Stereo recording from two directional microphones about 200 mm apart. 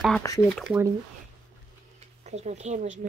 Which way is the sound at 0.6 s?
5° right (ahead or behind).